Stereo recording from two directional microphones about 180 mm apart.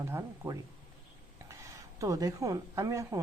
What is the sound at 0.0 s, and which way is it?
A woman's voice, 15° right (ahead or behind).